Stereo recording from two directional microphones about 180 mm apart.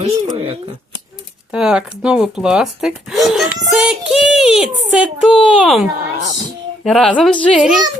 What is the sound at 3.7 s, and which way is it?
Child singing, 5° right (ahead or behind).